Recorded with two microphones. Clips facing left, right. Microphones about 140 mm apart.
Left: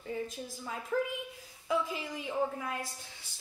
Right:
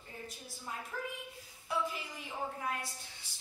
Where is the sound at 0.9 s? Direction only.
90° left.